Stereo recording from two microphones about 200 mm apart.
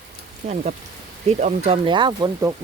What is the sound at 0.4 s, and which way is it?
Speech, 35° right (ahead or behind).